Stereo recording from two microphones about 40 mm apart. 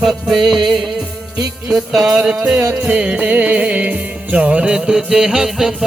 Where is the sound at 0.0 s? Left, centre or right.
Centre.